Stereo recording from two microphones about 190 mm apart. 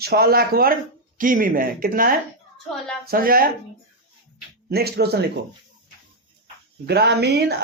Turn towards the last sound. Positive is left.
turn(degrees=-60)  # may be behind; listen again after turning